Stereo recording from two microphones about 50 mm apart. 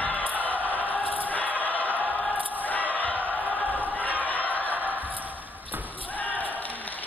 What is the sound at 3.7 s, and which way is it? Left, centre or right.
Crowd, left.